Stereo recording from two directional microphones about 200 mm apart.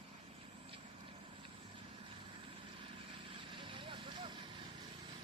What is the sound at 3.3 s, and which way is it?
Vehicle, 25° right (ahead or behind).